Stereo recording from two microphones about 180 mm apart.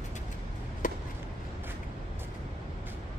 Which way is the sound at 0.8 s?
50° left (ahead or behind).